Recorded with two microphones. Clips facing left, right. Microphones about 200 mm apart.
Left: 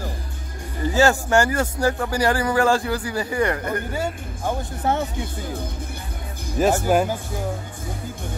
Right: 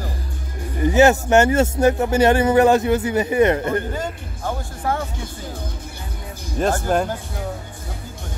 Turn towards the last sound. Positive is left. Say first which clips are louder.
# left 1 dB
turn(degrees=10)  # may be behind; listen again after turning